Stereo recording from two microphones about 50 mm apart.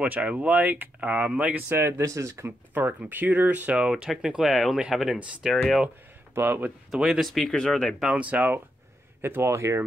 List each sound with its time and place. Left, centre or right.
0.0 s speech: right
1.7 s speech: right
2.7 s speech: right
3.7 s speech: centre
4.4 s speech: centre
5.5 s speech: centre
6.3 s speech: right
6.9 s speech: centre
7.2 s speech: centre
8.1 s speech: right
9.2 s speech: right
9.6 s speech: right